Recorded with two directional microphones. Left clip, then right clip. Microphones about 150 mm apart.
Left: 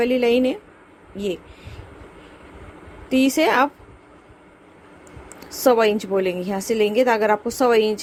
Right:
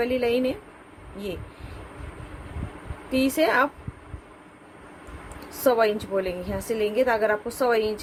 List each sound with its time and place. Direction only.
0.0 s a woman's voice: 65° left (ahead or behind)
3.1 s a woman's voice: 65° left (ahead or behind)
5.6 s a woman's voice: 65° left (ahead or behind)